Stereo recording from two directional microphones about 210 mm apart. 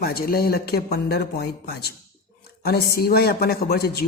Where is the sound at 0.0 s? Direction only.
45° left (ahead or behind).